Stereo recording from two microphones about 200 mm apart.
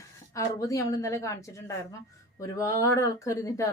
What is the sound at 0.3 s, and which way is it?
Speech, 15° left (ahead or behind).